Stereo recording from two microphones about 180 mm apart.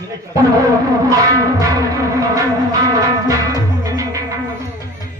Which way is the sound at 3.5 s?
20° right (ahead or behind).